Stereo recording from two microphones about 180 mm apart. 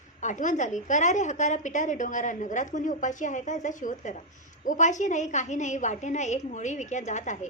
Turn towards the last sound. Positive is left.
turn(degrees=45)  # may be behind; listen again after turning